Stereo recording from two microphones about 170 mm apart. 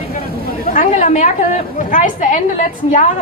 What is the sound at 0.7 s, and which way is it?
A woman's voice, 45° left (ahead or behind).